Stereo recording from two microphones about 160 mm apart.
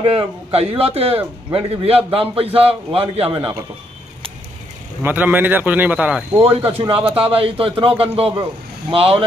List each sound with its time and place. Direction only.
0.0 s a man's voice: 35° right (ahead or behind)
5.0 s speech: 10° right (ahead or behind)
6.4 s a man's voice: 35° right (ahead or behind)